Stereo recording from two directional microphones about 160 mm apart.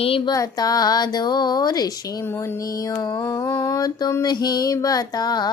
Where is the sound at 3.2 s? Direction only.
20° left (ahead or behind).